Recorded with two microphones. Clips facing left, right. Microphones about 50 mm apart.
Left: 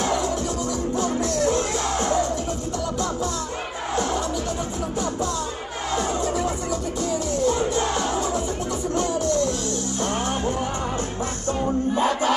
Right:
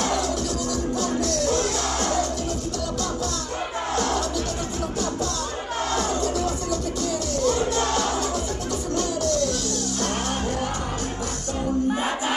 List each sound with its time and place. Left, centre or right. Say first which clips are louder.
1.0 s music: left 2 dB; left
5.9 s music: left 2 dB; centre